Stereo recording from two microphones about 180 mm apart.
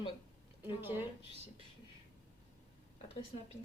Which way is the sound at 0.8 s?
10° right (ahead or behind).